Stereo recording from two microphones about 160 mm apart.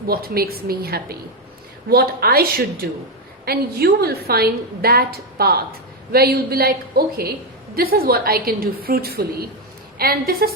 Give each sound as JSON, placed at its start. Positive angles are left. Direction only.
{"t": 0.1, "sound": "a woman's voice", "side_deg": -70}